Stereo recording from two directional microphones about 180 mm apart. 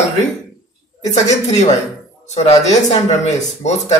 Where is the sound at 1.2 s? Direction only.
40° left (ahead or behind).